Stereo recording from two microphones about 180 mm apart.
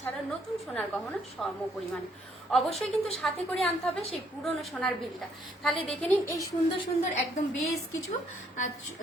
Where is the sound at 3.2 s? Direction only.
5° left (ahead or behind).